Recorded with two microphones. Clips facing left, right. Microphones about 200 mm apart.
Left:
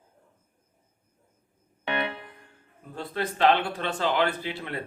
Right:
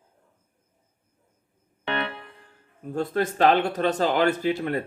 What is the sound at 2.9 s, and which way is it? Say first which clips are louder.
Speech: right 6 dB; 45° right (ahead or behind).